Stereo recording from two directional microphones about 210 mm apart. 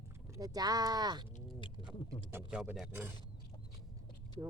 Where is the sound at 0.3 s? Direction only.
15° right (ahead or behind).